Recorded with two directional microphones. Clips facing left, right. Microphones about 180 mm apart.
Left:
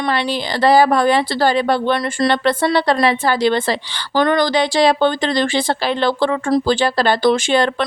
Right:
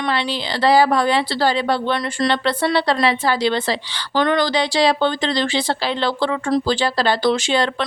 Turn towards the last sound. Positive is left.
turn(degrees=50)  # may be behind; listen again after turning